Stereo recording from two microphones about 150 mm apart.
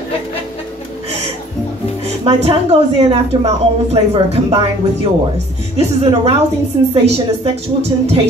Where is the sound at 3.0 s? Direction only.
40° right (ahead or behind).